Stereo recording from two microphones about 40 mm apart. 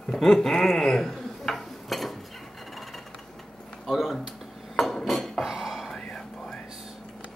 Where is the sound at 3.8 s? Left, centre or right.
Centre.